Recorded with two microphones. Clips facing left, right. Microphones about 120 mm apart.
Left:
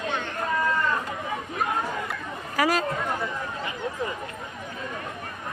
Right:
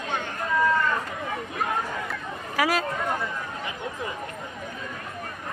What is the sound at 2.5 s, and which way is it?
Speech, 5° right (ahead or behind).